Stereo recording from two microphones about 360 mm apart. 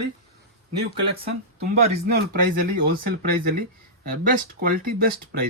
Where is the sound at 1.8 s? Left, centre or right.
Right.